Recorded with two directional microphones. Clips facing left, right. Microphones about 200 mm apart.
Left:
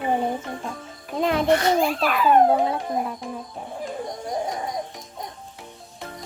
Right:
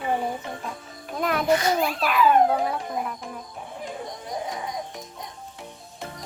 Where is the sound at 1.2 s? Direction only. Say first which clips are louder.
Left 4 dB; 25° left (ahead or behind).